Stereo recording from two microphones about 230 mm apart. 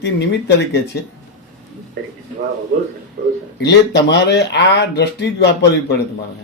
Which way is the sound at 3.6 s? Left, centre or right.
Left.